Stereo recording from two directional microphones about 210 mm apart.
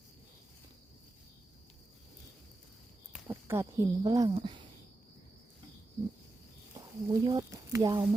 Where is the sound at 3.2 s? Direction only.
10° right (ahead or behind).